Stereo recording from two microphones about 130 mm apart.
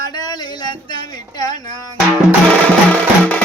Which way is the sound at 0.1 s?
35° left (ahead or behind).